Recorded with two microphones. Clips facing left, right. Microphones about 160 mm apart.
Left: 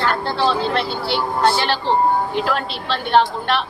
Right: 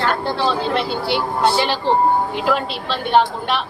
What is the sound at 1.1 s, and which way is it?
A woman's voice, 10° right (ahead or behind).